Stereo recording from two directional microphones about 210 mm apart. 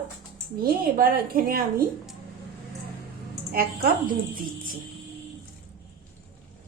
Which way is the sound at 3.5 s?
40° right (ahead or behind).